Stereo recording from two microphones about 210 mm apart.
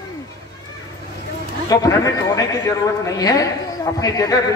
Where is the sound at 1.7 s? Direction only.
15° left (ahead or behind).